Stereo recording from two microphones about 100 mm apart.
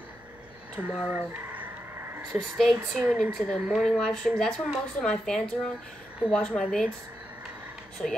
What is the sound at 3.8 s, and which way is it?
A woman's voice, 5° left (ahead or behind).